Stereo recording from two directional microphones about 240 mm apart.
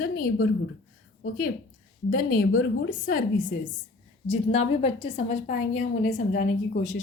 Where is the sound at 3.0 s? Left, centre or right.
Left.